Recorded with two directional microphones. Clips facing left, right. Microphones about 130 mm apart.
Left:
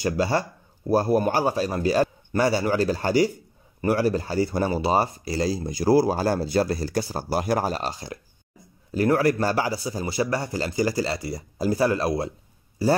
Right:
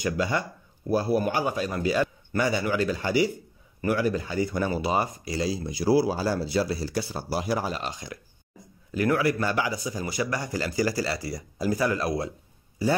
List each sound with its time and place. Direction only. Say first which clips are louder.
0.0 s speech: left 3 dB; 35° left (ahead or behind)